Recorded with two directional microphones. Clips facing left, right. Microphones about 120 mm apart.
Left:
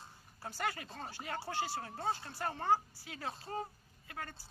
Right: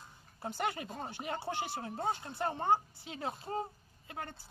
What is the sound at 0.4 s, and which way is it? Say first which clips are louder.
Speech: right 3 dB; 20° right (ahead or behind).